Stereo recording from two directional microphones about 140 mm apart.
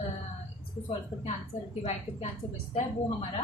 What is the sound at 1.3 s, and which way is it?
A woman's voice, 50° left (ahead or behind).